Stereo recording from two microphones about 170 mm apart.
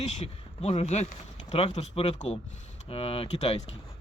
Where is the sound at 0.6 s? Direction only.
35° left (ahead or behind).